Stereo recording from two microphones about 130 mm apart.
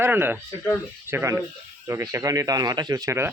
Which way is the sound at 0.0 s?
15° right (ahead or behind).